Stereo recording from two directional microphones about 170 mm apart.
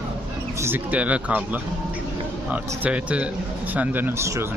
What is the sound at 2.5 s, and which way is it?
Speech, 10° right (ahead or behind).